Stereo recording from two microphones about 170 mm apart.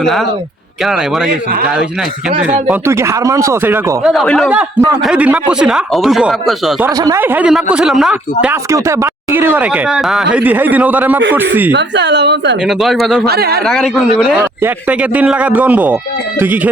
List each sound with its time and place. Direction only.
2.5 s speech: 10° right (ahead or behind)
4.1 s a man's voice: centre (ahead or behind)
6.8 s speech: 15° right (ahead or behind)
8.7 s speech: 15° right (ahead or behind)
11.7 s a woman's voice: 90° right
12.6 s a man's voice: centre (ahead or behind)
13.2 s speech: 65° right (ahead or behind)
13.7 s a man's voice: centre (ahead or behind)